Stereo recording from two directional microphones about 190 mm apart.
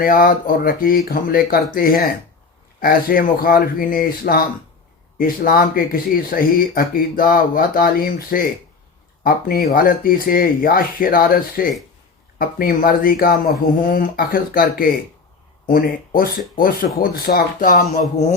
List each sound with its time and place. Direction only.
0.0 s speech: 50° left (ahead or behind)